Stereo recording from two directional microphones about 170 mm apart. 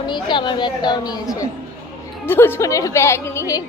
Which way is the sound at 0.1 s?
25° left (ahead or behind).